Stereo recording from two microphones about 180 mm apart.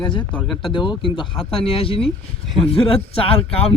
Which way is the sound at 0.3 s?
Centre (ahead or behind).